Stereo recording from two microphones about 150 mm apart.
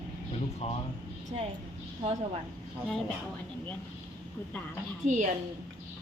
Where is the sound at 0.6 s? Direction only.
45° left (ahead or behind).